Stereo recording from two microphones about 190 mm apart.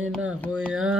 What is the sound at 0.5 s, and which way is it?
Speech, 5° right (ahead or behind).